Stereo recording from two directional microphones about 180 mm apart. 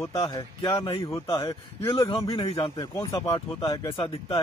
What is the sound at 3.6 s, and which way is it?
Speech, 30° left (ahead or behind).